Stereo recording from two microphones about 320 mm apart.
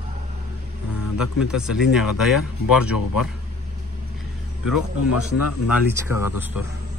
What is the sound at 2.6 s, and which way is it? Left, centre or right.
Speech, left.